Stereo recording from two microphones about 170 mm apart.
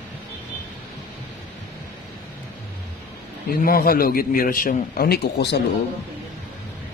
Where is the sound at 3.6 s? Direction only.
60° left (ahead or behind); by 5.6 s 80° left.